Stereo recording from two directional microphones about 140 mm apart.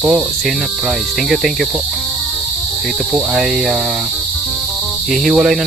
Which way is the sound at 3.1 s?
5° right (ahead or behind).